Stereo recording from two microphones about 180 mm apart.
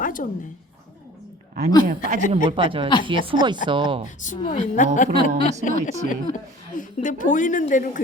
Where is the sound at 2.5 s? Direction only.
30° right (ahead or behind).